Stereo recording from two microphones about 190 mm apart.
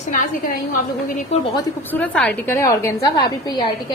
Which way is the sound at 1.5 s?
20° left (ahead or behind).